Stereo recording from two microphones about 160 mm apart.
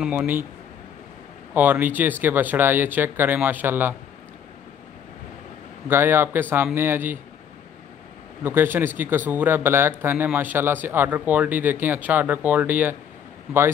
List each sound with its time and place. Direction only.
0.0 s speech: 5° right (ahead or behind)
1.5 s speech: 10° right (ahead or behind)
5.9 s speech: 15° right (ahead or behind)
8.5 s speech: 15° right (ahead or behind)